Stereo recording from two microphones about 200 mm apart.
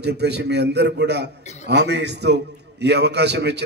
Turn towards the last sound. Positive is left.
turn(degrees=-55)  # may be behind; listen again after turning